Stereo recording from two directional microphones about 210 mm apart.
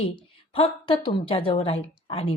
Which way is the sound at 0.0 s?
25° left (ahead or behind).